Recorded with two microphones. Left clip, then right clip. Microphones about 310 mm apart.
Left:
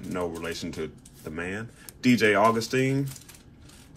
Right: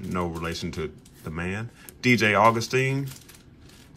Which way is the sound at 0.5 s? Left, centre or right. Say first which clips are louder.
Right 1 dB; right.